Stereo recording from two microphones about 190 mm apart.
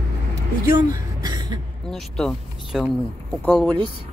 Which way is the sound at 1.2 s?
20° right (ahead or behind).